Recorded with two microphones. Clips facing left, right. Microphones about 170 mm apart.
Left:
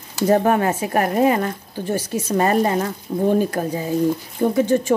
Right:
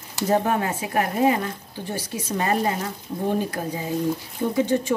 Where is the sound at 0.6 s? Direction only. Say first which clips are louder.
Left 5 dB; 50° left (ahead or behind).